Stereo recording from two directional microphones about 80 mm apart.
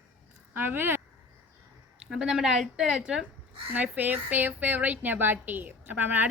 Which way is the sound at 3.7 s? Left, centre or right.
Right.